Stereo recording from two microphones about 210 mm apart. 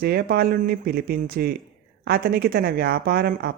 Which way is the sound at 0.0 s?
50° right (ahead or behind).